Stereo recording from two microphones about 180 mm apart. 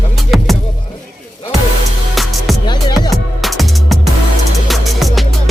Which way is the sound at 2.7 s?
25° left (ahead or behind).